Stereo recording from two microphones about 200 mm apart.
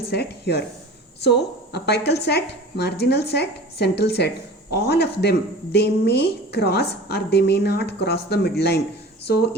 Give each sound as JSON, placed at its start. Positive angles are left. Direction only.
{"t": 0.1, "sound": "speech", "side_deg": 55}